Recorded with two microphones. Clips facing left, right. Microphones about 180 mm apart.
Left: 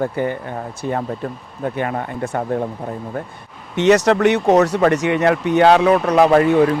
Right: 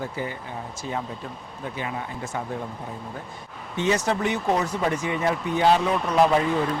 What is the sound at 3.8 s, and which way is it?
Speech, 75° left (ahead or behind).